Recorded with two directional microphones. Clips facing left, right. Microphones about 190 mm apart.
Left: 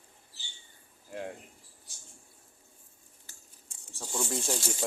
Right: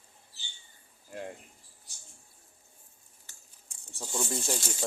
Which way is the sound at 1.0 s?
Centre (ahead or behind).